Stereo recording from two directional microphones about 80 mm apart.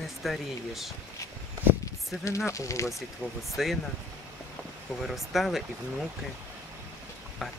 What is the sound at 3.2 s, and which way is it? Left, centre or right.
Speech, centre.